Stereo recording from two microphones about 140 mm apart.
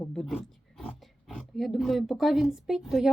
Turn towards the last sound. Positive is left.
turn(degrees=-5)  # may be behind; listen again after turning